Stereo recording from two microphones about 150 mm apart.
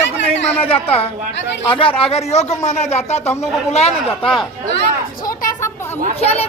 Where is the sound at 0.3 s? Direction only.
40° left (ahead or behind).